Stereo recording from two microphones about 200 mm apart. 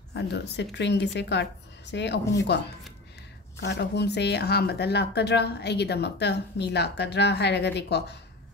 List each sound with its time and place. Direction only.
0.1 s a woman's voice: 60° left (ahead or behind)
3.6 s a woman's voice: 55° left (ahead or behind)